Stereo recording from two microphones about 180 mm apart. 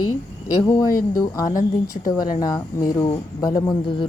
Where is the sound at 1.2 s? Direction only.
20° left (ahead or behind).